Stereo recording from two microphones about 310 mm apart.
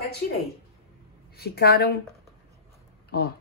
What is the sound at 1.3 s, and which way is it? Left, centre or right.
Speech, left.